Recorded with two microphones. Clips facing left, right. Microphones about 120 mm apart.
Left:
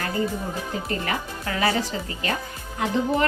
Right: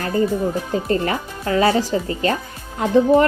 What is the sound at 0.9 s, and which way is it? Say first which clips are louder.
A woman's voice: right 7 dB; 35° right (ahead or behind).